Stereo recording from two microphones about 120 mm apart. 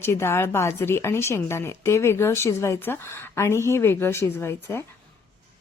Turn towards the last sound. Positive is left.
turn(degrees=20)  # may be behind; listen again after turning